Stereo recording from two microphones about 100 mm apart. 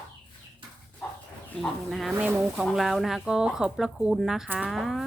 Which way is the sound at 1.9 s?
Centre (ahead or behind).